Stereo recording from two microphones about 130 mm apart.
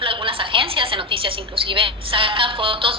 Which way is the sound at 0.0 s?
40° right (ahead or behind).